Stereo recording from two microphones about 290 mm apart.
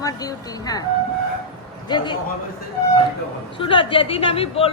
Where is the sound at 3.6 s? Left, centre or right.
Centre.